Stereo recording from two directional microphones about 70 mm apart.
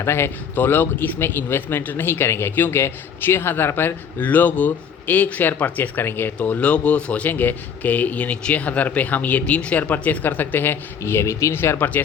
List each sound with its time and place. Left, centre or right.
0.0 s a man's voice: left
11.5 s speech: left